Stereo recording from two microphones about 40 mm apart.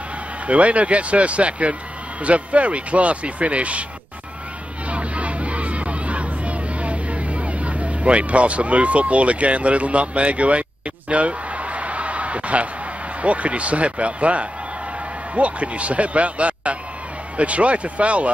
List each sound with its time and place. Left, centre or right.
0.5 s speech: right
4.8 s hubbub: right
11.1 s a sound: right
13.2 s speech: right